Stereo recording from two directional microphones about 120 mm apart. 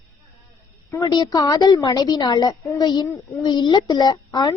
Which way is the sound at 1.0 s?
35° left (ahead or behind).